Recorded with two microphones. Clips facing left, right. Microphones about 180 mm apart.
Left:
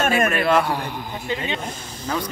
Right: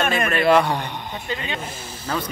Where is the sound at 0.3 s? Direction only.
5° left (ahead or behind).